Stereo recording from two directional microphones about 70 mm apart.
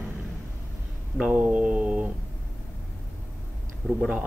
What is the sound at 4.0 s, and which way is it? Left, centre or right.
Speech, centre.